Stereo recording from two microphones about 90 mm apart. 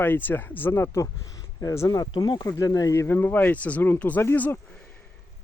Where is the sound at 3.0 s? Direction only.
20° left (ahead or behind).